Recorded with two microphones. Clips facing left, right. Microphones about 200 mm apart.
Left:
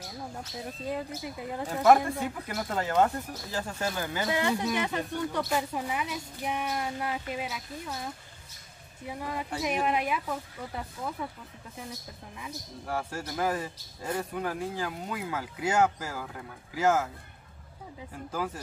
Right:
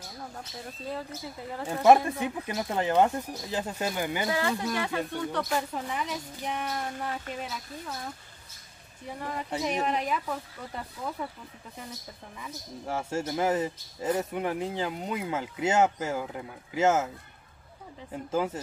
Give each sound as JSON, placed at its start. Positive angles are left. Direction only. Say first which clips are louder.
{"t": 0.8, "sound": "speech", "louder": "left 2 dB", "side_deg": 15}
{"t": 1.8, "sound": "speech", "louder": "right 2 dB", "side_deg": -20}
{"t": 4.3, "sound": "speech", "louder": "left 1 dB", "side_deg": 20}
{"t": 9.0, "sound": "speech", "louder": "even", "side_deg": 10}
{"t": 12.8, "sound": "speech", "louder": "right 3 dB", "side_deg": -25}
{"t": 18.1, "sound": "speech", "louder": "right 5 dB", "side_deg": -25}